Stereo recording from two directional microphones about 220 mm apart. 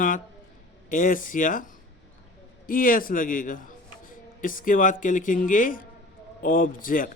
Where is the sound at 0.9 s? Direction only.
35° left (ahead or behind).